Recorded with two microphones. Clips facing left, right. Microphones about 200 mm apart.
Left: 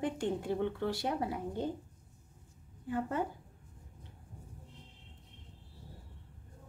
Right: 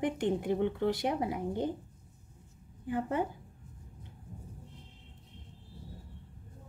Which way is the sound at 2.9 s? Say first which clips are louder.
Right 2 dB; 15° right (ahead or behind).